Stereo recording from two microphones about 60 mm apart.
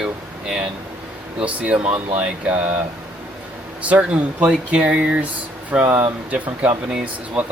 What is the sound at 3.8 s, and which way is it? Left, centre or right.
Speech, right.